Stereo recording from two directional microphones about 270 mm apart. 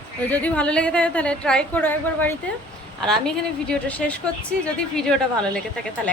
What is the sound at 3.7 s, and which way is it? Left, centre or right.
A woman's voice, centre.